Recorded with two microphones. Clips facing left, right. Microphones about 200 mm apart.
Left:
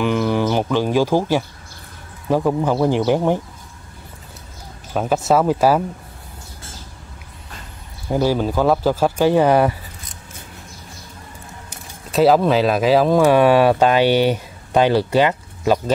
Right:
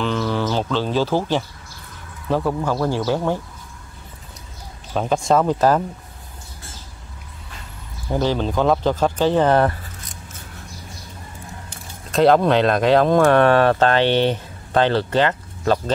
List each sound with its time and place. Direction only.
0.0 s music: 15° left (ahead or behind)
2.2 s speech: 15° left (ahead or behind)
4.9 s speech: 5° left (ahead or behind)
8.1 s speech: 10° left (ahead or behind)
12.1 s speech: 5° left (ahead or behind)